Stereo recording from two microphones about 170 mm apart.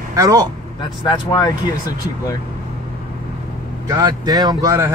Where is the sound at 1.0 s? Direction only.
25° left (ahead or behind).